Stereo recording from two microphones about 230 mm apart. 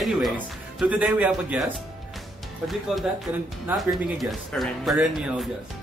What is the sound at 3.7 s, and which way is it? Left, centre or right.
Speech, centre.